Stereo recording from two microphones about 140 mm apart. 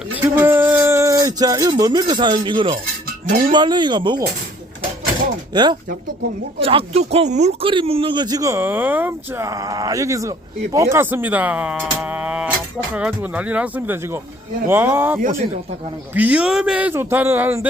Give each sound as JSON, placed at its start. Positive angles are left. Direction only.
{"t": 0.1, "sound": "speech", "side_deg": -15}
{"t": 5.5, "sound": "speech", "side_deg": -30}
{"t": 6.6, "sound": "speech", "side_deg": -45}
{"t": 7.6, "sound": "a man's voice", "side_deg": -40}